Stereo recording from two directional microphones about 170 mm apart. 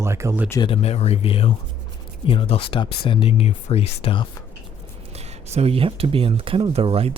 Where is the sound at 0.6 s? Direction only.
35° left (ahead or behind).